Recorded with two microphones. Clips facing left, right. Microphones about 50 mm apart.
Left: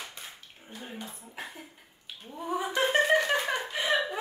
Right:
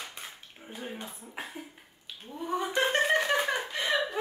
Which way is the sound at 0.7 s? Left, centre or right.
Centre.